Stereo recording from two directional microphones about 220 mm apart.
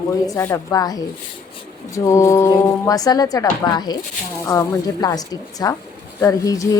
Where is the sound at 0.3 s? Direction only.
15° left (ahead or behind).